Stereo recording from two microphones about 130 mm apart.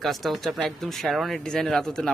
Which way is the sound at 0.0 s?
Centre (ahead or behind).